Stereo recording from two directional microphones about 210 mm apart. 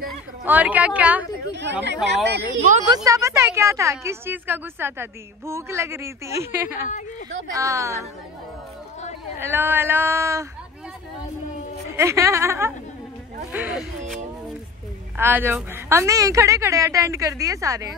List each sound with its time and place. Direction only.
0.4 s a woman's voice: 5° right (ahead or behind)
1.5 s speech: 55° right (ahead or behind)
2.9 s a woman's voice: 15° right (ahead or behind)
9.4 s a woman's voice: 10° right (ahead or behind)
12.0 s a woman's voice: 15° right (ahead or behind)
15.1 s a woman's voice: 10° right (ahead or behind)